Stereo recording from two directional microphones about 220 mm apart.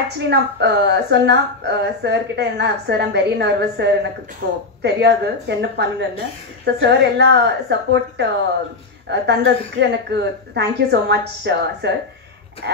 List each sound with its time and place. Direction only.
0.2 s a woman's voice: 50° right (ahead or behind)